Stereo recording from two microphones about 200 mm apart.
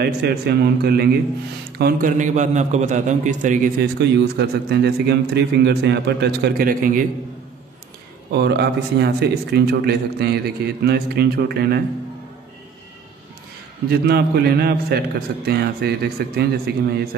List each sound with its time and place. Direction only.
0.0 s a man's voice: 55° right (ahead or behind); by 3.7 s 40° right (ahead or behind)
4.2 s a man's voice: 55° right (ahead or behind)
8.3 s a man's voice: 55° right (ahead or behind)
13.8 s a man's voice: 55° right (ahead or behind)